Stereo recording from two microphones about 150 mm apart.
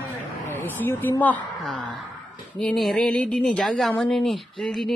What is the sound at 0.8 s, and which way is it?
A woman's voice, 15° left (ahead or behind).